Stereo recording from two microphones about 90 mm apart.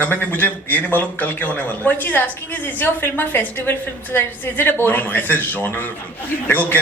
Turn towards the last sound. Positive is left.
turn(degrees=20)  # may be behind; listen again after turning